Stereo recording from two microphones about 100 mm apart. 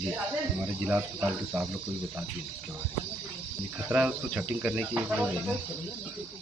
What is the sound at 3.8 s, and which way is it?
Speech, 10° right (ahead or behind).